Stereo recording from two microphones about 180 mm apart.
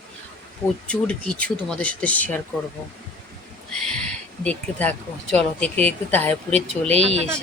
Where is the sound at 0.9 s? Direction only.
5° left (ahead or behind).